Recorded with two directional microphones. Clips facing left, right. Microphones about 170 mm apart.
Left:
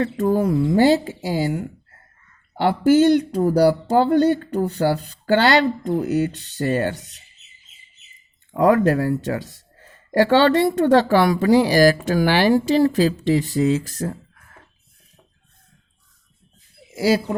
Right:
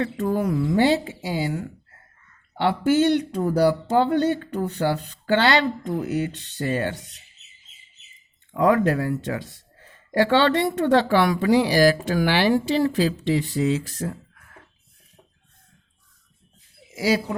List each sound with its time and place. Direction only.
0.0 s speech: 35° left (ahead or behind)
2.6 s speech: 40° left (ahead or behind)
8.5 s speech: 40° left (ahead or behind)